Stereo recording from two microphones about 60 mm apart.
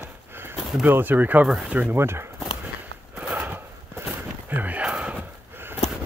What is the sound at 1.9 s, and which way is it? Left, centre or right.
Speech, right.